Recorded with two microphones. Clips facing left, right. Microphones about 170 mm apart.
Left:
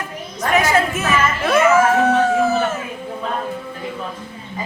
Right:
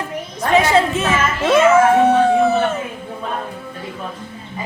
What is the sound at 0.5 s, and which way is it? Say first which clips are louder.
Speech: right 3 dB; 30° right (ahead or behind).